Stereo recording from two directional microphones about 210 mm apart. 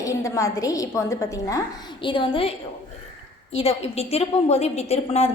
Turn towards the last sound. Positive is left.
turn(degrees=30)  # may be behind; listen again after turning